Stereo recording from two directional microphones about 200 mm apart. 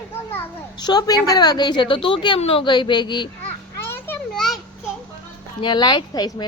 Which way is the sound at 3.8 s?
10° left (ahead or behind).